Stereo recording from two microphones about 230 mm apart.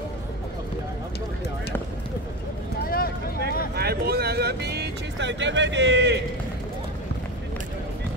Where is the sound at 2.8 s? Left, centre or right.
Left.